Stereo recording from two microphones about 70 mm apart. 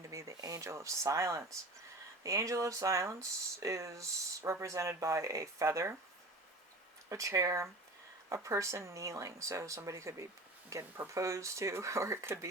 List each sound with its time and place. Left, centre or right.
0.1 s speech: right
7.1 s speech: right